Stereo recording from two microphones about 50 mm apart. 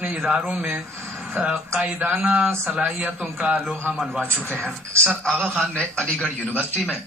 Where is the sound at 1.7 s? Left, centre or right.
Right.